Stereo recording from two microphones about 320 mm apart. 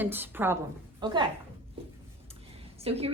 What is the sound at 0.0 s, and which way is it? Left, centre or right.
A woman's voice, centre.